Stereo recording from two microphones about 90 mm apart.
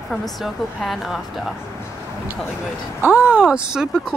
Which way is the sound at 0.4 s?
Centre (ahead or behind).